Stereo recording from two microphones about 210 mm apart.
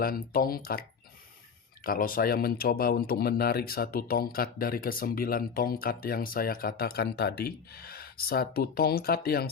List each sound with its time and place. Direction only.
0.0 s speech: 45° left (ahead or behind)